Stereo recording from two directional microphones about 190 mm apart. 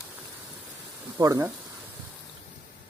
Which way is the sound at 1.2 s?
15° right (ahead or behind).